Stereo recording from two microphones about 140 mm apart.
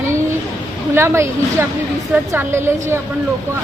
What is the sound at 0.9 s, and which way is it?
Speech, 20° right (ahead or behind).